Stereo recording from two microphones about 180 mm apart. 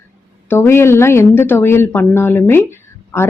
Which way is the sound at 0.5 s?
15° left (ahead or behind).